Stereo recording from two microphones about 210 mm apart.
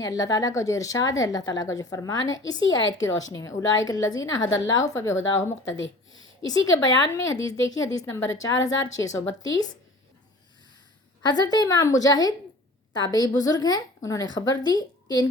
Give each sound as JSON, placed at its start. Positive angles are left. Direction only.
{"t": 0.0, "sound": "a woman's voice", "side_deg": 15}
{"t": 2.2, "sound": "a woman's voice", "side_deg": 65}
{"t": 2.5, "sound": "a woman's voice", "side_deg": 20}
{"t": 5.7, "sound": "speech", "side_deg": 65}
{"t": 6.4, "sound": "a woman's voice", "side_deg": 15}
{"t": 11.3, "sound": "a woman's voice", "side_deg": 20}